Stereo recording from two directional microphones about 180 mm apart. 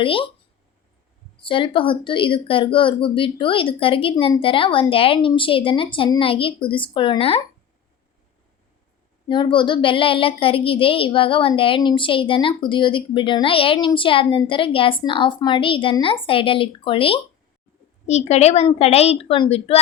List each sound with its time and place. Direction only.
0.0 s a woman's voice: 30° left (ahead or behind)
1.4 s a woman's voice: 30° left (ahead or behind)
9.3 s a woman's voice: 25° left (ahead or behind)